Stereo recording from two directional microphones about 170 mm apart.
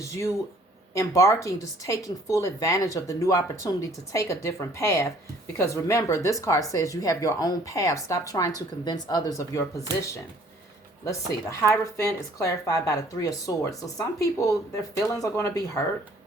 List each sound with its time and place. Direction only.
0.9 s a woman's voice: 20° left (ahead or behind)
11.6 s a woman's voice: 15° left (ahead or behind)